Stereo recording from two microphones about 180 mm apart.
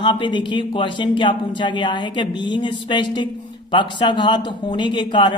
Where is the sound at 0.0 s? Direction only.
25° left (ahead or behind).